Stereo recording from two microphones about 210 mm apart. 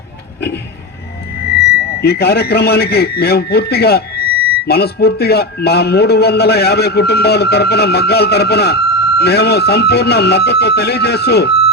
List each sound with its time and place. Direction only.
2.0 s a man's voice: 50° left (ahead or behind)